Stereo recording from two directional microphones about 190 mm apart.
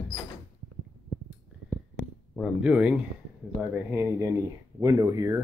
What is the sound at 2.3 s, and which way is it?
Speech, 5° right (ahead or behind).